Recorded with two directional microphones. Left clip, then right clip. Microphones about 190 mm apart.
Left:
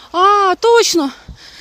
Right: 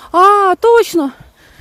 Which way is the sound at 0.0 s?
35° right (ahead or behind).